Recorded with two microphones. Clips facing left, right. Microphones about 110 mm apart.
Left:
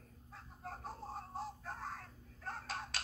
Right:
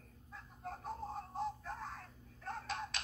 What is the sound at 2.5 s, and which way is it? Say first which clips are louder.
Finger snapping: right 2 dB; 35° left (ahead or behind).